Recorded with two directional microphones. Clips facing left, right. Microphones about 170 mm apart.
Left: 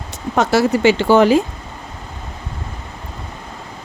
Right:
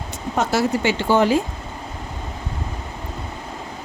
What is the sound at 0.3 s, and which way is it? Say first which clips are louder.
Speech: left 5 dB; 90° left.